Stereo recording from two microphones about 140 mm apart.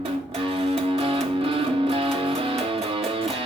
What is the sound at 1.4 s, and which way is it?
Music, 40° right (ahead or behind).